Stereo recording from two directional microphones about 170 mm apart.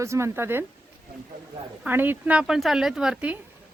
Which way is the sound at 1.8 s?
10° right (ahead or behind).